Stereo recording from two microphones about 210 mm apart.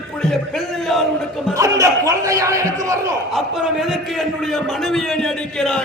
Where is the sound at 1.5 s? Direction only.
15° right (ahead or behind).